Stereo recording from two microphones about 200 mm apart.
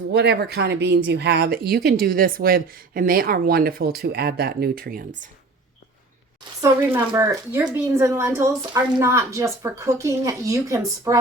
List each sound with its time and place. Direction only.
0.1 s speech: 55° right (ahead or behind)
6.6 s a woman's voice: 15° right (ahead or behind)